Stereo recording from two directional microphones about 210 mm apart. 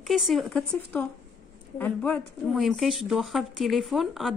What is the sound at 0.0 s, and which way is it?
A woman's voice, centre (ahead or behind).